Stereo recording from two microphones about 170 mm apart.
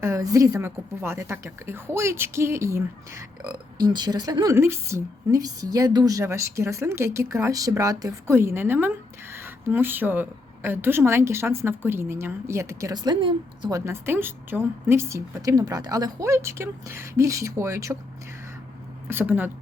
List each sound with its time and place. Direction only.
0.0 s a woman's voice: 20° right (ahead or behind)
19.0 s speech: 10° right (ahead or behind)